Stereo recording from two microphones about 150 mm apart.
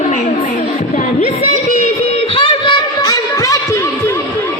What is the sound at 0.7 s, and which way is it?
Music, 50° left (ahead or behind).